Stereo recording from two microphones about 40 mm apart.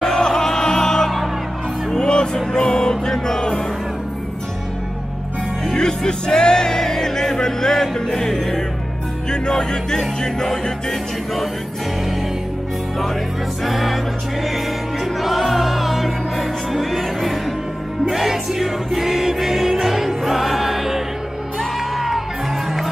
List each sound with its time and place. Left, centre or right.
0.0 s music: centre
5.7 s music: centre
13.7 s music: centre
15.1 s music: centre